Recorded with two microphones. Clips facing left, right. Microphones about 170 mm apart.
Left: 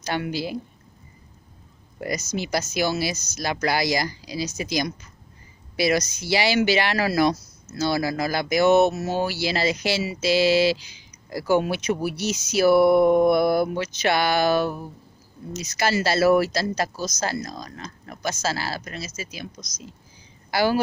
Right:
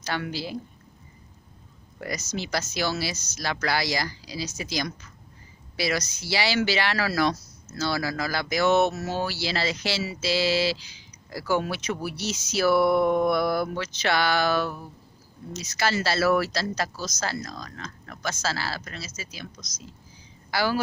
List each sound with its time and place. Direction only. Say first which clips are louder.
0.0 s speech: left 4 dB; 15° left (ahead or behind)
2.0 s speech: left 4 dB; 15° left (ahead or behind)